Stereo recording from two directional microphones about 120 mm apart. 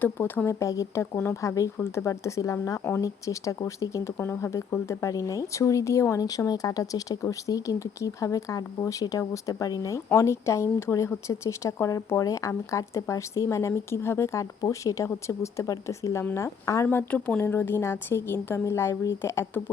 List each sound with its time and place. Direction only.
0.0 s speech: 15° left (ahead or behind)